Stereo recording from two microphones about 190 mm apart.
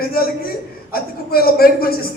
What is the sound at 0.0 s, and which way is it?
A man's voice, 55° left (ahead or behind).